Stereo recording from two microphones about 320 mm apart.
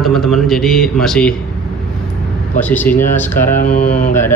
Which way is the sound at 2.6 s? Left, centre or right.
Centre.